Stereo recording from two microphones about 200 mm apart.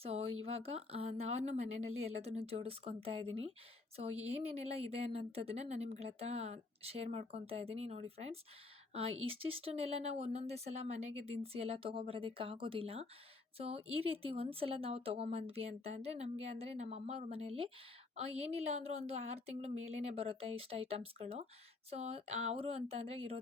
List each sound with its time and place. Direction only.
0.4 s a woman's voice: 30° right (ahead or behind)